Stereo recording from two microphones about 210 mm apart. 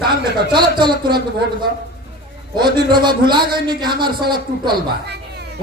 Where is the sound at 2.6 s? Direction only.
20° right (ahead or behind).